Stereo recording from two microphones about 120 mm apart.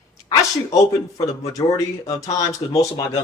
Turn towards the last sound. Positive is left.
turn(degrees=25)  # may be behind; listen again after turning